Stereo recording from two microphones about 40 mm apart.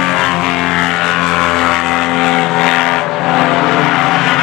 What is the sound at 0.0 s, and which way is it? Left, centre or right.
Vehicle, centre.